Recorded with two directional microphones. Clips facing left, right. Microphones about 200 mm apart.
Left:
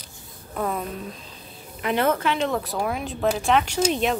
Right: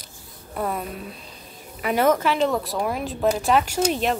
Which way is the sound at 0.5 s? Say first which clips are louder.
Even; 5° right (ahead or behind).